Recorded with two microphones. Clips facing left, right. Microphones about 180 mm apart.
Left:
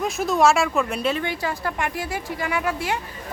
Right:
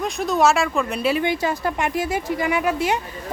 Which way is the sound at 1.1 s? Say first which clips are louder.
Right 5 dB; 15° right (ahead or behind).